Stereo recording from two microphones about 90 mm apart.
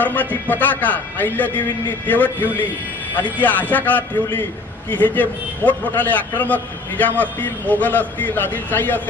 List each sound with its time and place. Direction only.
0.0 s a man's voice: 20° left (ahead or behind)